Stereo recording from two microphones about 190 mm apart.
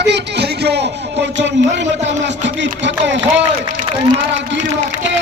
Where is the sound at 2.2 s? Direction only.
70° right (ahead or behind).